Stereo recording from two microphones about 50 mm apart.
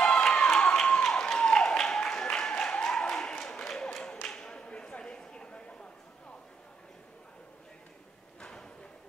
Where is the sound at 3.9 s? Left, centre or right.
Centre.